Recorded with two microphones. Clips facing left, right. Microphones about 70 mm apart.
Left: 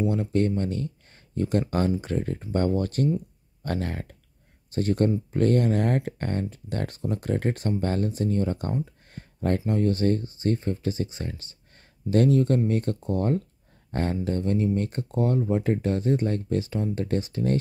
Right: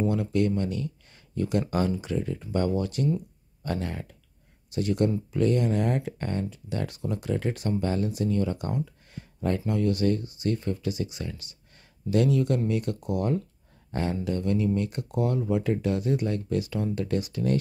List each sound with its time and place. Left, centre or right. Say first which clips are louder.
0.1 s speech: left 1 dB; left